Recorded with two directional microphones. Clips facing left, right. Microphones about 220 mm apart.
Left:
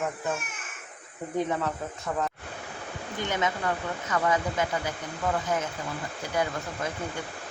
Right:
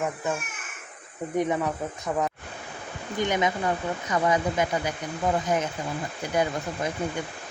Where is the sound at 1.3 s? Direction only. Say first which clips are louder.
Right 3 dB; 15° right (ahead or behind).